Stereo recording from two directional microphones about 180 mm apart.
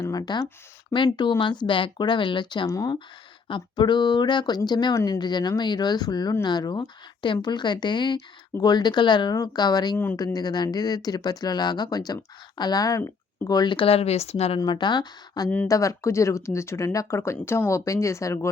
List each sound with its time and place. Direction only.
0.0 s speech: 20° left (ahead or behind)
10.0 s speech: 10° left (ahead or behind)
10.3 s speech: 20° left (ahead or behind)
14.6 s speech: 25° left (ahead or behind)